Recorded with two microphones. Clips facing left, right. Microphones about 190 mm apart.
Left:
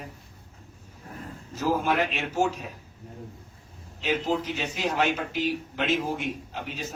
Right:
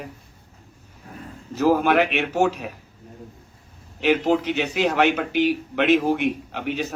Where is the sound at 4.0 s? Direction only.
70° right (ahead or behind).